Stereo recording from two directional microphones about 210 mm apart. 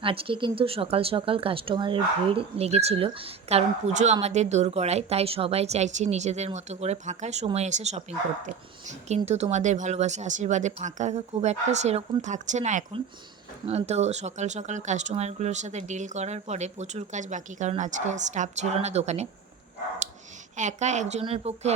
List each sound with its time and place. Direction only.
0.0 s speech: 25° right (ahead or behind)
20.6 s speech: 35° right (ahead or behind)